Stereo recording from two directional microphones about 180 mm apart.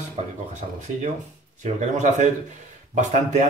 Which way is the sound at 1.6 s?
40° right (ahead or behind).